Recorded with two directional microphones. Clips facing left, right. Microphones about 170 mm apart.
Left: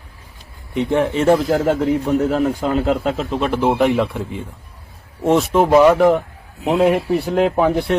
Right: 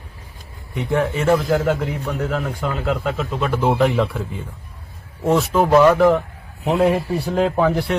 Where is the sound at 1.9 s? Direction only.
35° left (ahead or behind); by 3.9 s 15° left (ahead or behind).